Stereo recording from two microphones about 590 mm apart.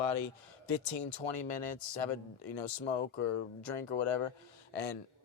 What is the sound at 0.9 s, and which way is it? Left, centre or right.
Speech, left.